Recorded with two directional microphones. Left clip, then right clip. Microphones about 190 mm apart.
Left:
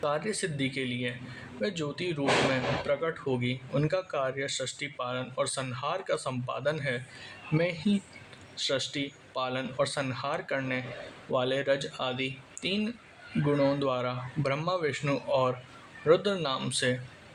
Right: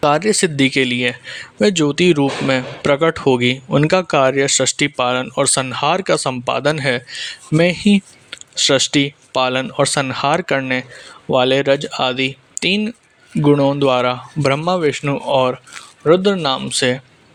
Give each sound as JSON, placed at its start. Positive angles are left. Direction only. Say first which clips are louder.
{"t": 0.0, "sound": "speech", "louder": "right 16 dB", "side_deg": -45}